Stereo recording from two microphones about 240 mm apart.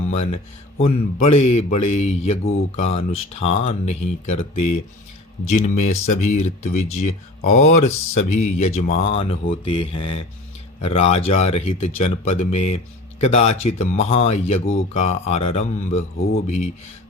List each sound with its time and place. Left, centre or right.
0.1 s speech: left